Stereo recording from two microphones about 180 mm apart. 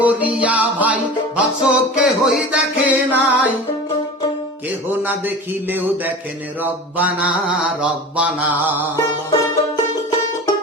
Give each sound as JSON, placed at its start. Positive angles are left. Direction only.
{"t": 0.0, "sound": "music", "side_deg": -10}
{"t": 4.9, "sound": "mantra", "side_deg": -10}
{"t": 9.0, "sound": "music", "side_deg": 20}